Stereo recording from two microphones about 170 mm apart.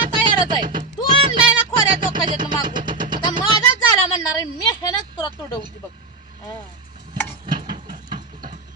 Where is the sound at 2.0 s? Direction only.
30° right (ahead or behind).